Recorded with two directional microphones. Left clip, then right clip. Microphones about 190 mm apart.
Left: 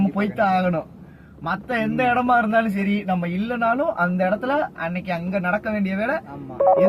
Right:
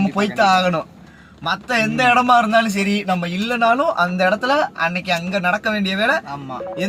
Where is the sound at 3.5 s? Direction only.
60° right (ahead or behind).